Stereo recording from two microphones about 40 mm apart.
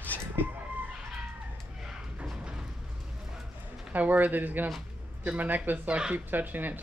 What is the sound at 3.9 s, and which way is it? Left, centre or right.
Speech, right.